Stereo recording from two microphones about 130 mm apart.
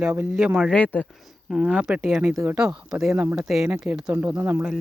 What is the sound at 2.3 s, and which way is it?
Speech, 20° right (ahead or behind).